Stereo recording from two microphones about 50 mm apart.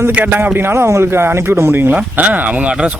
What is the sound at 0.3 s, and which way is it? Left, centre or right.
Speech, right.